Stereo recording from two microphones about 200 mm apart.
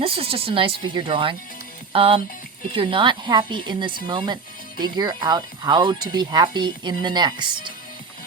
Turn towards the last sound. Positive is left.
turn(degrees=-25)  # may be behind; listen again after turning